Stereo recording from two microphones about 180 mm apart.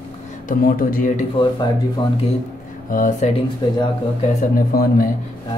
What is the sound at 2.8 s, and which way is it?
Speech, 50° left (ahead or behind).